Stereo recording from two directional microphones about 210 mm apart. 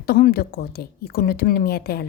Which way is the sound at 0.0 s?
45° left (ahead or behind).